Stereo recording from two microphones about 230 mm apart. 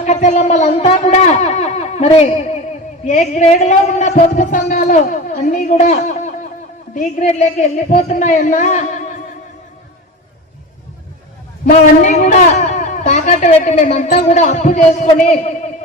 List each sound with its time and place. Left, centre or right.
0.0 s a man's voice: left
11.6 s a man's voice: left